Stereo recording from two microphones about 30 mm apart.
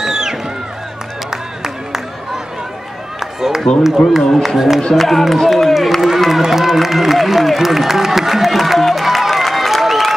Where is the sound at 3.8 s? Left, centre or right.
Centre.